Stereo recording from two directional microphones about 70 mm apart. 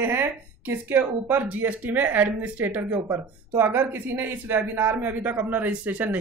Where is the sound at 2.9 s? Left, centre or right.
Right.